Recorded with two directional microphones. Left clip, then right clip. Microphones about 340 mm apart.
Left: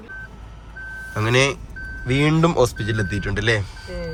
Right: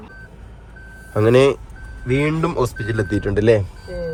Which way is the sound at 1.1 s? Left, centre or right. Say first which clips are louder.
Right 5 dB; centre.